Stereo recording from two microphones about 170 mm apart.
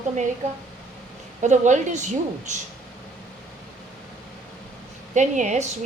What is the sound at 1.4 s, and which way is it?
A woman's voice, 45° right (ahead or behind).